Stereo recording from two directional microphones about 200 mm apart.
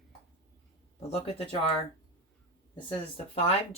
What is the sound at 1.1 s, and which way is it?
Speech, 30° left (ahead or behind).